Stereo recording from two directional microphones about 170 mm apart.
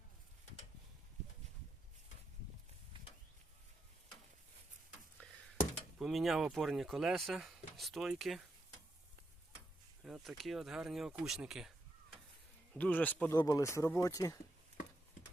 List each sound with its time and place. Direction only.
2.9 s a sound: 30° right (ahead or behind)
5.2 s a sound: 5° left (ahead or behind)
6.0 s speech: centre (ahead or behind)
10.0 s speech: centre (ahead or behind)
12.7 s speech: 10° left (ahead or behind)
13.3 s speech: 20° left (ahead or behind)